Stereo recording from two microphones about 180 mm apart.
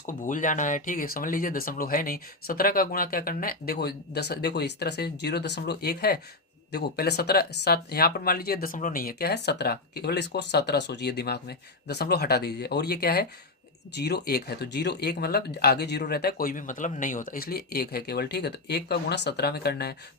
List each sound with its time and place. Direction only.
0.0 s speech: 45° left (ahead or behind); by 19.9 s 60° left (ahead or behind)